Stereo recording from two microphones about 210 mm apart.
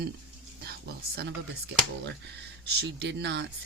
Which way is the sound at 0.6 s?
50° right (ahead or behind).